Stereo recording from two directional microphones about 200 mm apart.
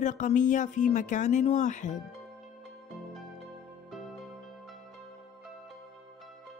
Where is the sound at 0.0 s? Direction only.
40° left (ahead or behind).